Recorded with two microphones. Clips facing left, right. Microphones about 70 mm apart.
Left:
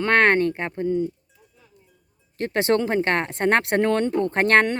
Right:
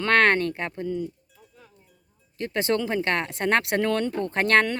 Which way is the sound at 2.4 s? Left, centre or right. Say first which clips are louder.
Left 4 dB; left.